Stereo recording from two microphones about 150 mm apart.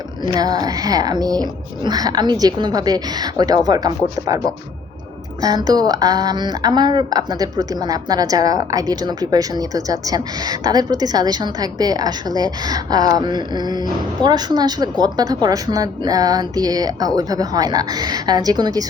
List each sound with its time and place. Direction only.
0.3 s a woman's voice: 25° right (ahead or behind)
5.4 s a woman's voice: 25° right (ahead or behind)